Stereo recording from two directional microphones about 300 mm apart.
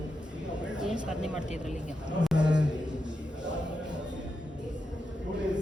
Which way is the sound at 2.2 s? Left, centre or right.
Centre.